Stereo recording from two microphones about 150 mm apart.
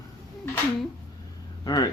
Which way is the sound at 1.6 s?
25° left (ahead or behind).